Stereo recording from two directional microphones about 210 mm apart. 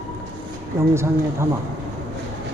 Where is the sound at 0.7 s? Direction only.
10° right (ahead or behind).